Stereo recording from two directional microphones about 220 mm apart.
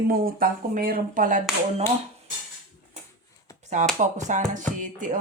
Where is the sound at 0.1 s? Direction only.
40° right (ahead or behind).